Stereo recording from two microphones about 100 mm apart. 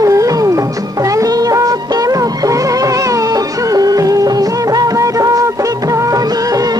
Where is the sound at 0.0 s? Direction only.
35° right (ahead or behind).